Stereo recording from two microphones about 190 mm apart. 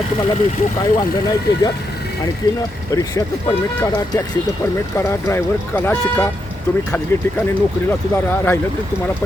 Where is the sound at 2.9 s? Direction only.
15° left (ahead or behind).